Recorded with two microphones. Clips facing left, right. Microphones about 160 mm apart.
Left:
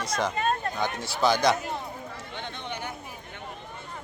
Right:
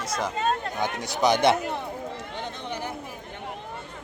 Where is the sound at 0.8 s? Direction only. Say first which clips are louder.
Right 1 dB; 20° right (ahead or behind).